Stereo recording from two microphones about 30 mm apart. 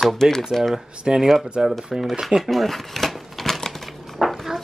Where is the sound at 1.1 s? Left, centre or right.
Right.